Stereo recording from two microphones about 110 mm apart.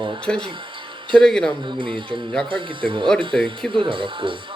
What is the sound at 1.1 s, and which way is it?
Speech, 5° left (ahead or behind).